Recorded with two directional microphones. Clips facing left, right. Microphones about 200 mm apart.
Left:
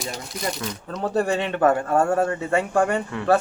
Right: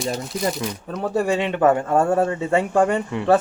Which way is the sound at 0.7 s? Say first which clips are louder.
Right 1 dB; 10° right (ahead or behind).